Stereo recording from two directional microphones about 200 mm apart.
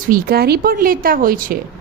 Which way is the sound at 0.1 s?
50° right (ahead or behind).